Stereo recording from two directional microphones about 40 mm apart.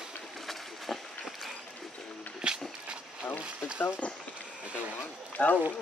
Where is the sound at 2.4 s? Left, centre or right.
Right.